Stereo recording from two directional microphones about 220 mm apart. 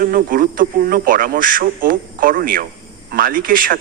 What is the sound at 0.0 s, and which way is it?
A man's voice, 40° right (ahead or behind).